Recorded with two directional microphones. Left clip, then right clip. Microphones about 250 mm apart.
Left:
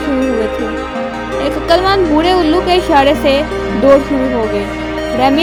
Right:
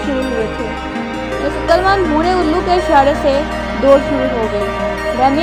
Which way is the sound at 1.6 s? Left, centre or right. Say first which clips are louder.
Left 1 dB; left.